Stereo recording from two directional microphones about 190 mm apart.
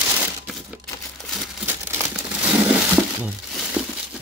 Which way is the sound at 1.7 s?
10° right (ahead or behind).